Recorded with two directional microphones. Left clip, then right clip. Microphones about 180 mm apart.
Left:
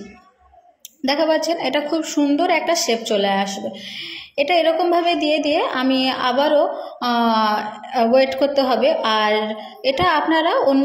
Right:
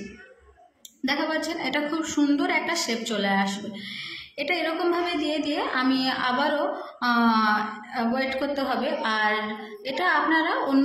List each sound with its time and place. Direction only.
1.0 s a woman's voice: 30° left (ahead or behind)